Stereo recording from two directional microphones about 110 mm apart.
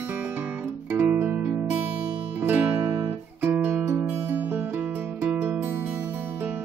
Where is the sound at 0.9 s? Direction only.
15° right (ahead or behind).